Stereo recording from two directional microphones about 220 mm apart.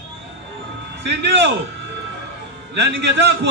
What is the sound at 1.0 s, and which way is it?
Speech, 50° right (ahead or behind).